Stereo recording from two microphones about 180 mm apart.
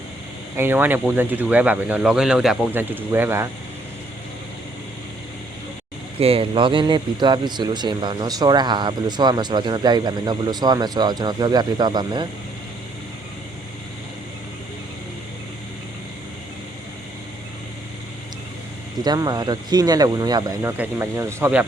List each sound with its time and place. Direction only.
0.5 s speech: 10° right (ahead or behind)
6.1 s speech: 30° right (ahead or behind)
19.0 s speech: 20° right (ahead or behind)